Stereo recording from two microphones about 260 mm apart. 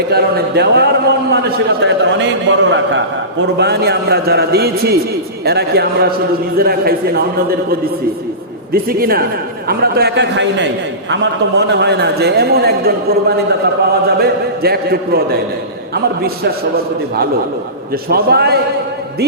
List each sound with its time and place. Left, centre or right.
0.1 s a man's voice: right